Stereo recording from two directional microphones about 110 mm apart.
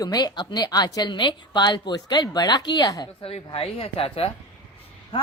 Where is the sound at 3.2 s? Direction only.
60° left (ahead or behind).